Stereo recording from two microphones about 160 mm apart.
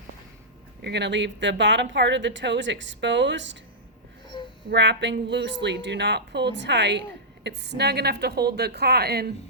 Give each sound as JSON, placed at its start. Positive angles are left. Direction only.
{"t": 0.8, "sound": "a woman's voice", "side_deg": -90}
{"t": 4.7, "sound": "a woman's voice", "side_deg": -90}